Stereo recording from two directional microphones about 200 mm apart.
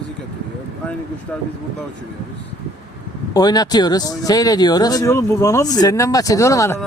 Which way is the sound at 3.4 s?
20° left (ahead or behind).